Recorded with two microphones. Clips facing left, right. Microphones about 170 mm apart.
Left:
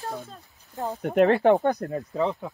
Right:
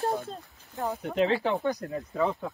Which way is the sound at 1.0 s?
60° left (ahead or behind).